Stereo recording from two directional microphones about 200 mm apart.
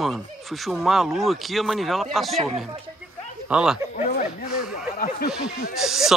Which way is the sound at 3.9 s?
40° left (ahead or behind).